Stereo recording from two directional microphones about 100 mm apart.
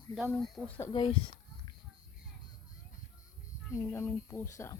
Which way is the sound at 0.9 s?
55° left (ahead or behind).